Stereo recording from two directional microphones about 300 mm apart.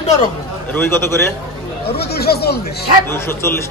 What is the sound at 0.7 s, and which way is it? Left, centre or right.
Speech, centre.